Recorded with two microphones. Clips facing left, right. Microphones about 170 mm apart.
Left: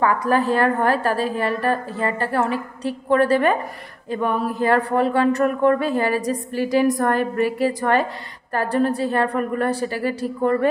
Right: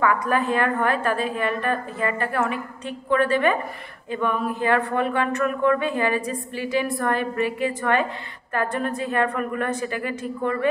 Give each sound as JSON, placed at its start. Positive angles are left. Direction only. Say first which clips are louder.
{"t": 0.0, "sound": "speech", "louder": "left 3 dB", "side_deg": 35}